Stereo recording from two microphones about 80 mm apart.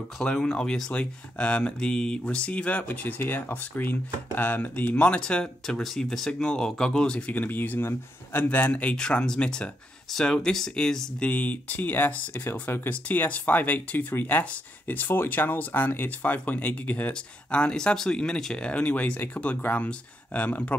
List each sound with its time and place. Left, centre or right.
0.2 s speech: centre
8.9 s speech: centre
11.2 s speech: centre